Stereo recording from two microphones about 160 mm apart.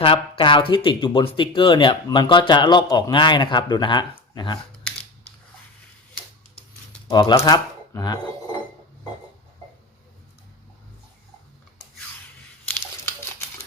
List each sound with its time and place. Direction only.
0.0 s speech: 35° left (ahead or behind)
7.1 s speech: 25° left (ahead or behind)